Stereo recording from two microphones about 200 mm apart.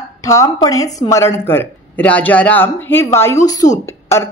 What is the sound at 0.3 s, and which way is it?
A woman's voice, 15° left (ahead or behind).